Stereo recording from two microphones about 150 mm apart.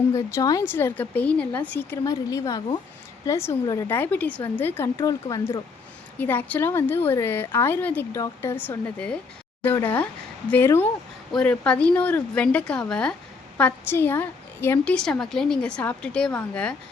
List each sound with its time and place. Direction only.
0.1 s a woman's voice: 20° left (ahead or behind)
6.1 s a woman's voice: 10° left (ahead or behind)